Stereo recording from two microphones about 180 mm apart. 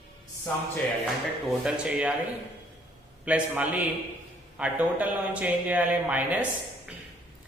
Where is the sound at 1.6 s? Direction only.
5° right (ahead or behind).